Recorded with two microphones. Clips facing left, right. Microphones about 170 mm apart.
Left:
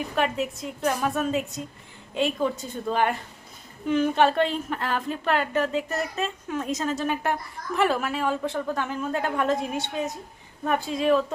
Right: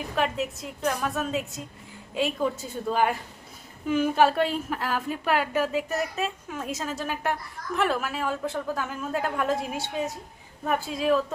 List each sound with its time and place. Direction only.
0.2 s a woman's voice: centre (ahead or behind)